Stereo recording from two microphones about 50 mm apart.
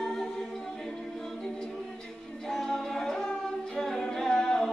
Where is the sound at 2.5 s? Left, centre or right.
Centre.